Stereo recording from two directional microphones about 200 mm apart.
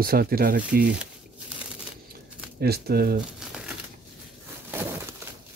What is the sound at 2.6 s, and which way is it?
Speech, 50° right (ahead or behind).